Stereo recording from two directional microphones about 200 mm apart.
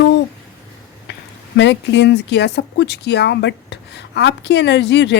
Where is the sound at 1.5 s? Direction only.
60° left (ahead or behind).